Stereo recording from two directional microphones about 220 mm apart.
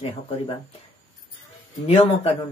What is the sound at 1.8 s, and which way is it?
Speech, 25° left (ahead or behind).